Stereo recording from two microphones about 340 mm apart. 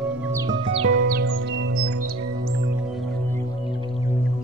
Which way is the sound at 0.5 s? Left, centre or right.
Centre.